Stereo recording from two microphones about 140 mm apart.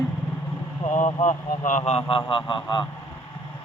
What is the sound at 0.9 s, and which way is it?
Speech, 60° left (ahead or behind).